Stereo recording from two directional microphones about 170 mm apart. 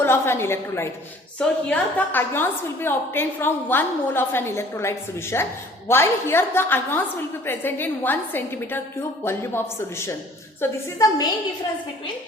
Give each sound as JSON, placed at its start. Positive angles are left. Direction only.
{"t": 0.0, "sound": "a woman's voice", "side_deg": 15}